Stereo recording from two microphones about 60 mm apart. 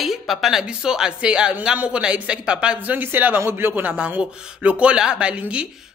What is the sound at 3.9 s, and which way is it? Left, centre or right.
Speech, right.